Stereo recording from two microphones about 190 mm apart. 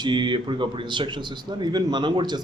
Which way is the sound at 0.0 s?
25° right (ahead or behind).